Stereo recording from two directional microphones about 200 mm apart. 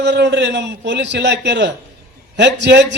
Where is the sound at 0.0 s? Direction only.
60° right (ahead or behind).